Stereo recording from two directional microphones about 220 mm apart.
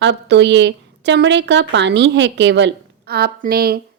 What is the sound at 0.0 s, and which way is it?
A woman's voice, 55° right (ahead or behind).